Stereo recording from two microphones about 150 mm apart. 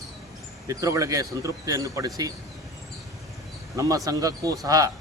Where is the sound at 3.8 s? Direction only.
20° right (ahead or behind).